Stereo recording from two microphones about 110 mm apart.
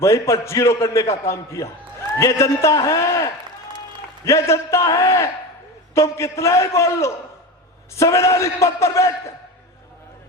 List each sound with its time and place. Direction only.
0.0 s a man's voice: 25° left (ahead or behind)